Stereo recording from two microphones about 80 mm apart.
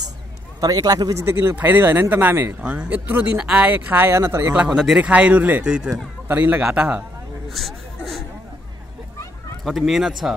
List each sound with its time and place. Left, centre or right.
0.6 s a man's voice: right
1.2 s speech: right
4.6 s speech: centre
6.2 s a man's voice: right
6.6 s speech: centre
7.4 s a sound: centre
9.7 s speech: centre